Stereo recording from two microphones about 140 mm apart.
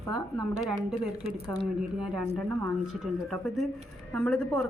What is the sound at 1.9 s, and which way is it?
Speech, 5° right (ahead or behind).